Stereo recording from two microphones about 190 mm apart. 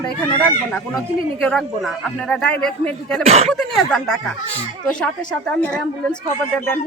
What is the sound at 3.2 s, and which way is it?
Speech, 35° right (ahead or behind).